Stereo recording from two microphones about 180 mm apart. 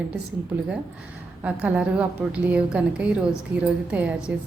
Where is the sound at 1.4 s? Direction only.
5° right (ahead or behind).